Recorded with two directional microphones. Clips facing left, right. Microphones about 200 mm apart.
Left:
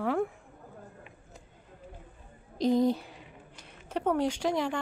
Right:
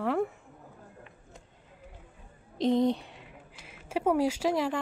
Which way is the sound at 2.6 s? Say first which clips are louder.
Even; centre (ahead or behind).